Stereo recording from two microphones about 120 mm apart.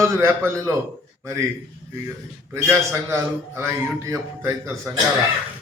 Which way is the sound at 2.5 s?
25° right (ahead or behind).